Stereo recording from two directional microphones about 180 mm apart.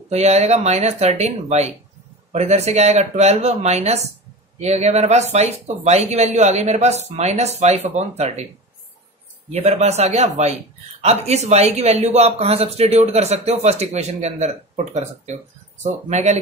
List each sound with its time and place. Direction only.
0.1 s a man's voice: 40° right (ahead or behind)
9.5 s a man's voice: 40° right (ahead or behind)
15.8 s a man's voice: 40° right (ahead or behind)